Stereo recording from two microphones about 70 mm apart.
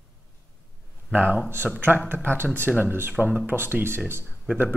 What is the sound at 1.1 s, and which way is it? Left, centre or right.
Speech, right.